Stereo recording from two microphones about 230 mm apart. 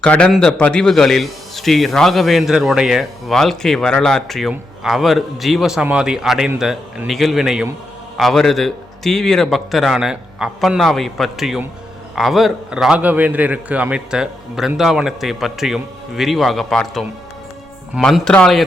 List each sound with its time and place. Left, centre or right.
0.0 s a man's voice: centre